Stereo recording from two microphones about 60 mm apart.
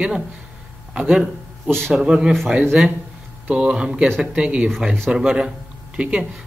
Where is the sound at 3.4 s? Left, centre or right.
Right.